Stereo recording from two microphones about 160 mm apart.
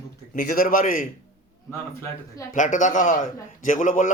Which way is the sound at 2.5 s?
50° left (ahead or behind).